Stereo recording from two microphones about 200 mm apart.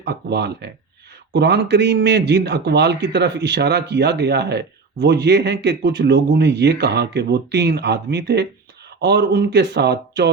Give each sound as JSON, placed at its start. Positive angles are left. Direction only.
{"t": 0.0, "sound": "a man's voice", "side_deg": -55}